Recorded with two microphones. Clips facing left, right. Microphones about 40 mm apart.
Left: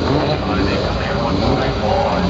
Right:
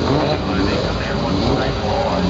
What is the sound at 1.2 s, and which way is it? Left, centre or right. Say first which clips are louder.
Vehicle: left 1 dB; left.